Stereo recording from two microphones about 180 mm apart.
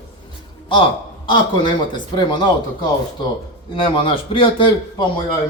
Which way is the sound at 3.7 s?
30° left (ahead or behind).